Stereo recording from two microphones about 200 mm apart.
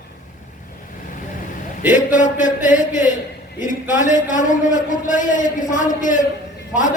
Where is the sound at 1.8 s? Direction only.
40° left (ahead or behind).